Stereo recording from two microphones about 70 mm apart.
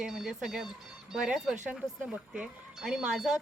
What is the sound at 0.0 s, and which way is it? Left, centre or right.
Speech, centre.